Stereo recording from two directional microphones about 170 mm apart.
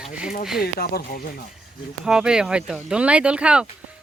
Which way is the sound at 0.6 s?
65° left (ahead or behind).